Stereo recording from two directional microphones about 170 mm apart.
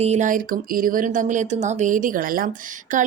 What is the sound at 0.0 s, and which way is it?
A woman's voice, 45° right (ahead or behind).